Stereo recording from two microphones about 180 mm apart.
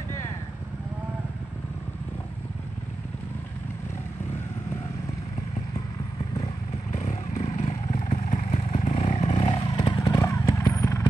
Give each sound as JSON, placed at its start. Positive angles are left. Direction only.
{"t": 6.9, "sound": "vehicle", "side_deg": 40}